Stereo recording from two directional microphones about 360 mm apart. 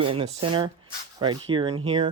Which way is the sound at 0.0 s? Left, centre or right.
Centre.